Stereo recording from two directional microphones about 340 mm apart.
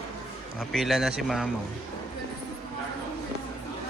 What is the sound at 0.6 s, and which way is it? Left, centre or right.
Speech, centre.